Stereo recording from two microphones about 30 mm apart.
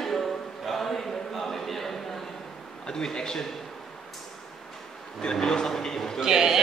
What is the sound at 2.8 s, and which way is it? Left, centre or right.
Speech, left.